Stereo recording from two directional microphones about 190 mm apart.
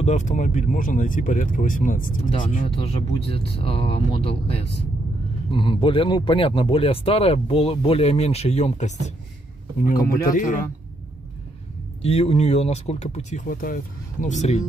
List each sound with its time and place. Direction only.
0.0 s speech: 40° left (ahead or behind)
2.7 s speech: 30° left (ahead or behind)
9.8 s speech: 50° left (ahead or behind)
12.0 s speech: 35° left (ahead or behind)